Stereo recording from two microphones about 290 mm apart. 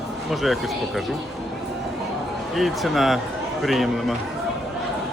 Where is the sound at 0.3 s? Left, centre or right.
Centre.